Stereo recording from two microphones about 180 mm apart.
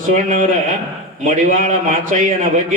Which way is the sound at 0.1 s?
45° right (ahead or behind).